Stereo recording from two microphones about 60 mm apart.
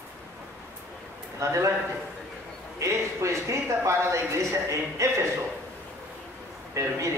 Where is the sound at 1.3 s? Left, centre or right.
Right.